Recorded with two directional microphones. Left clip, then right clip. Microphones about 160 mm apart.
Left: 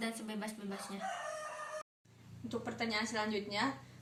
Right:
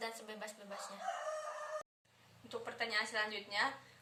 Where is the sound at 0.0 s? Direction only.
20° right (ahead or behind).